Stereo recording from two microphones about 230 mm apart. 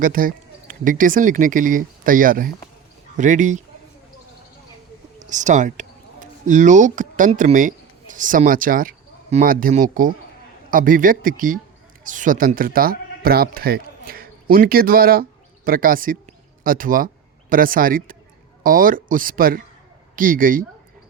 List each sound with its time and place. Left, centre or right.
0.0 s speech: right
5.2 s speech: right